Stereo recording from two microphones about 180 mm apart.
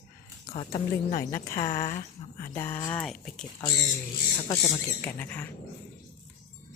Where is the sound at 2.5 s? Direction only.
10° left (ahead or behind).